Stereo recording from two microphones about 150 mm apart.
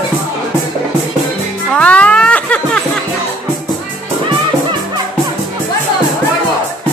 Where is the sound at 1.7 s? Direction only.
10° left (ahead or behind).